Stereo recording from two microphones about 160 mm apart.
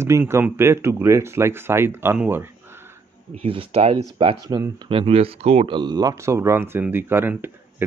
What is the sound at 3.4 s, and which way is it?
Speech, 35° right (ahead or behind).